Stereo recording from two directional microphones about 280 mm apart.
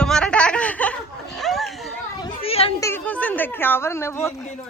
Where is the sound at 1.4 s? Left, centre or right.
Centre.